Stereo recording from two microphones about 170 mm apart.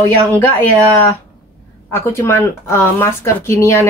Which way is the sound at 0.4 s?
10° left (ahead or behind).